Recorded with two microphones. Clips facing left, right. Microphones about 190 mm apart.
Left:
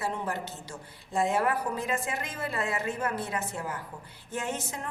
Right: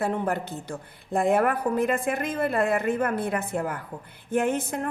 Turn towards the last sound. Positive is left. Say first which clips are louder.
# right 9 dB
turn(degrees=-55)  # may be behind; listen again after turning